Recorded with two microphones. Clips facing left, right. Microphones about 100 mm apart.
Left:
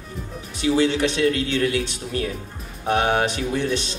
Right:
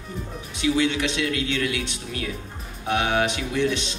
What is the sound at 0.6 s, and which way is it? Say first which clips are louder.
Speech: left 3 dB; 35° left (ahead or behind).